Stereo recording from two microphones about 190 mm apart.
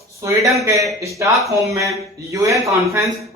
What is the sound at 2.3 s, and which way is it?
A man's voice, 15° right (ahead or behind).